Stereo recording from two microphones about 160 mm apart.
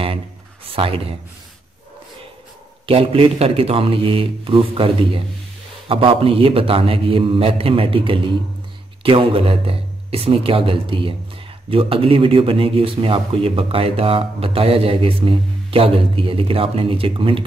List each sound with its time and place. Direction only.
0.7 s speech: 35° right (ahead or behind)
2.9 s speech: 35° right (ahead or behind)